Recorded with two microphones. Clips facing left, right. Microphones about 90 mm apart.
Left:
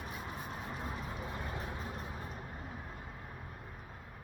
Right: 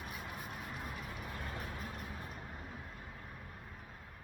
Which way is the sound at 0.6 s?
25° left (ahead or behind).